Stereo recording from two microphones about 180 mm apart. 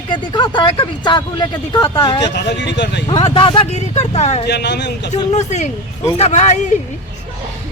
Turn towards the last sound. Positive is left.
turn(degrees=40)  # may be behind; listen again after turning